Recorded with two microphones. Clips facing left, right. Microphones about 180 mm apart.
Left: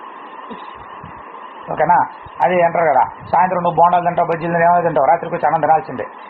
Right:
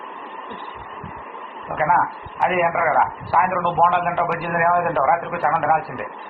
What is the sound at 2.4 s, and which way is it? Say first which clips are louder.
A man's voice: left 6 dB; 35° left (ahead or behind).